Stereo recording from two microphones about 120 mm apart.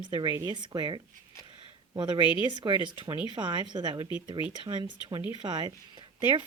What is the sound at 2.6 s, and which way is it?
Speech, 30° right (ahead or behind).